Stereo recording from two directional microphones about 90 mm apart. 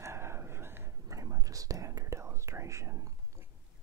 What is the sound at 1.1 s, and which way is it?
Whispering, 40° right (ahead or behind).